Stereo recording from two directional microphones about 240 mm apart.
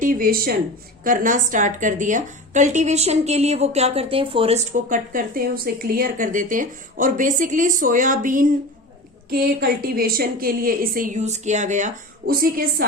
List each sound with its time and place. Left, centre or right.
0.0 s a woman's voice: right